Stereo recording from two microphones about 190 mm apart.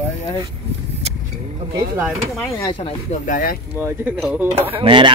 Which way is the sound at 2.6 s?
20° left (ahead or behind).